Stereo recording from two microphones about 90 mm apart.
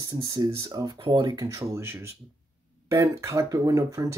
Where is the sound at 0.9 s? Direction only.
55° right (ahead or behind).